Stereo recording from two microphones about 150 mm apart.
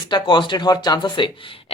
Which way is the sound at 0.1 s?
30° left (ahead or behind).